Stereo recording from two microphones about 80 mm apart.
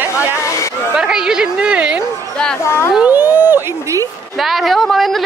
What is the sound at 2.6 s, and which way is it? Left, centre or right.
Speech, left.